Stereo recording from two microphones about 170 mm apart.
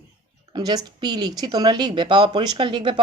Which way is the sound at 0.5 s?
25° right (ahead or behind).